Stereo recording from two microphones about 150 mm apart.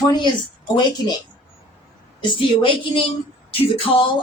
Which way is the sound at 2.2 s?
35° left (ahead or behind).